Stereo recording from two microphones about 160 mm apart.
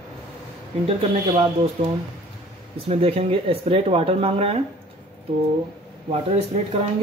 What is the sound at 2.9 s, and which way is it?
Speech, 35° right (ahead or behind).